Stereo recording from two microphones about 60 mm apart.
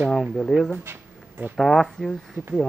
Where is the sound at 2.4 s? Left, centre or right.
Right.